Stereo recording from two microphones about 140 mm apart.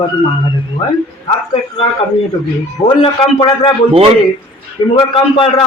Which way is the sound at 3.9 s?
40° right (ahead or behind).